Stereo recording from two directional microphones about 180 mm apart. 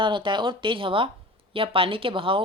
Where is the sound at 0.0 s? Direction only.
25° right (ahead or behind).